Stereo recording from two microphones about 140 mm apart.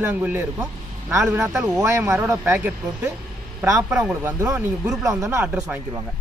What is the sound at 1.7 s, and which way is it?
Speech, 20° right (ahead or behind).